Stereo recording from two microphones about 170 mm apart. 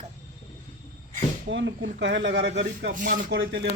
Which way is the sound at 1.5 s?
90° right.